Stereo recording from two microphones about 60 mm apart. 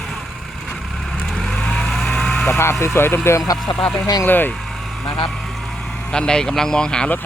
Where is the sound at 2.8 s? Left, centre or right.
Left.